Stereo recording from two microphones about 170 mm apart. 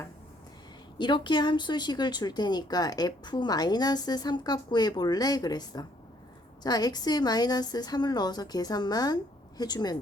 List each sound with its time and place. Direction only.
0.9 s speech: 25° left (ahead or behind)